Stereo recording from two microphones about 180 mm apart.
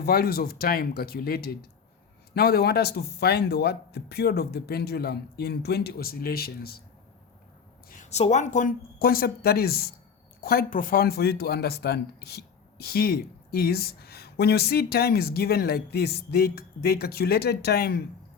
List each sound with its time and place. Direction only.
0.0 s speech: 60° left (ahead or behind)
7.9 s speech: 45° left (ahead or behind); by 18.0 s 60° left (ahead or behind)